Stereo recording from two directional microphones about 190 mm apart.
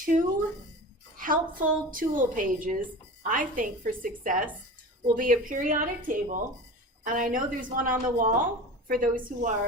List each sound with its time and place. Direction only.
0.0 s a woman's voice: 45° right (ahead or behind)